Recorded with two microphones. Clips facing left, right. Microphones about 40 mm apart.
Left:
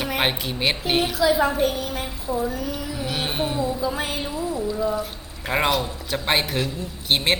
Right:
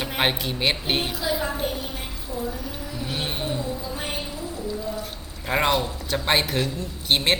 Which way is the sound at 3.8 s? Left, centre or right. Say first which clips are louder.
Left 5 dB; left.